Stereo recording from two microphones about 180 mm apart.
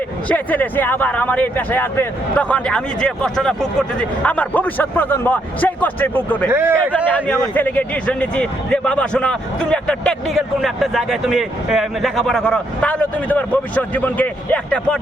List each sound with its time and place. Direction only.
0.3 s speech: 10° left (ahead or behind)
6.5 s a man's voice: 10° right (ahead or behind)
6.7 s a man's voice: 10° left (ahead or behind)